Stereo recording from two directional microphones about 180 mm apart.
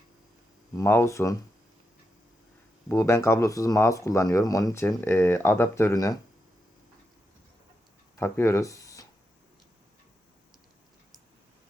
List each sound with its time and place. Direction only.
0.8 s speech: 15° left (ahead or behind)
2.9 s speech: 15° left (ahead or behind)
8.1 s speech: 15° left (ahead or behind)